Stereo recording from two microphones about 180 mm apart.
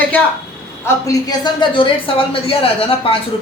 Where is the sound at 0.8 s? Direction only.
20° left (ahead or behind).